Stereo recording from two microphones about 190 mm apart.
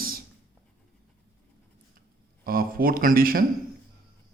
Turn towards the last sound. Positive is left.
turn(degrees=-50)  # may be behind; listen again after turning